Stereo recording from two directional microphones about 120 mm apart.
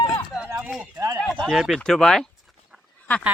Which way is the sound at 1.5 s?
5° right (ahead or behind).